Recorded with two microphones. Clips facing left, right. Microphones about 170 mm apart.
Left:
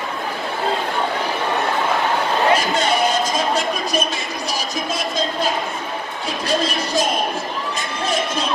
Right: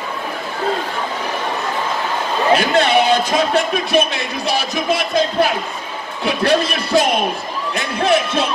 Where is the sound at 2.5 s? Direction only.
65° right (ahead or behind).